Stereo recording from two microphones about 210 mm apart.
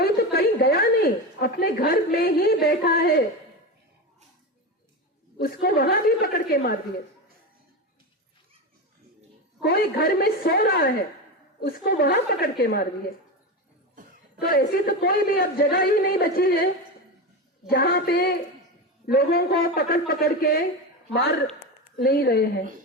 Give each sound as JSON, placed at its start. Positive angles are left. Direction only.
{"t": 0.0, "sound": "a sound", "side_deg": 50}
{"t": 5.4, "sound": "a man's voice", "side_deg": 45}
{"t": 9.6, "sound": "a man's voice", "side_deg": 45}
{"t": 14.4, "sound": "a man's voice", "side_deg": 45}
{"t": 17.7, "sound": "a man's voice", "side_deg": 45}